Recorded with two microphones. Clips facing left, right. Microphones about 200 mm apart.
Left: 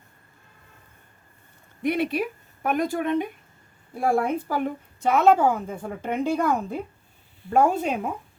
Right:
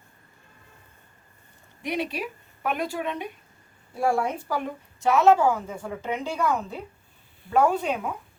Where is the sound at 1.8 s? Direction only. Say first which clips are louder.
Left 5 dB; 55° left (ahead or behind).